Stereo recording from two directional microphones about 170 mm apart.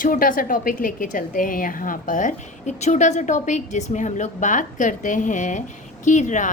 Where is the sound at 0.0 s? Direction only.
55° left (ahead or behind).